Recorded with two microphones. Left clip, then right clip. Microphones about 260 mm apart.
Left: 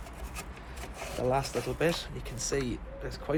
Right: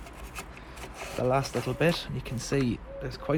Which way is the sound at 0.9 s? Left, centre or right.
Centre.